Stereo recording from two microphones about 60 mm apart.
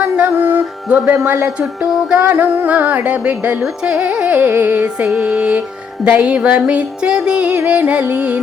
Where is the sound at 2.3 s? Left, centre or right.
Right.